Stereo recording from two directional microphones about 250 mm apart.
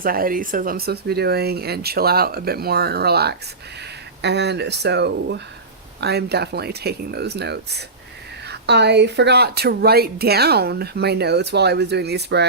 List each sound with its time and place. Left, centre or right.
0.0 s a woman's voice: right